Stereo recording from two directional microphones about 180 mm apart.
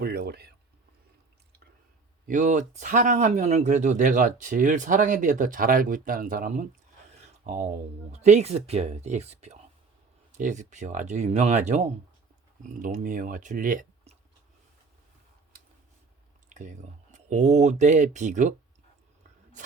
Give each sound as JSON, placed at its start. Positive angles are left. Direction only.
{"t": 0.0, "sound": "speech", "side_deg": -60}
{"t": 2.2, "sound": "speech", "side_deg": -45}
{"t": 16.5, "sound": "speech", "side_deg": -45}